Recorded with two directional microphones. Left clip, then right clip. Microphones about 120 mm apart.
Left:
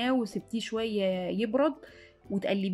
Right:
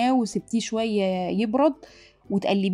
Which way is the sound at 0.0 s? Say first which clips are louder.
Right 7 dB; 30° right (ahead or behind).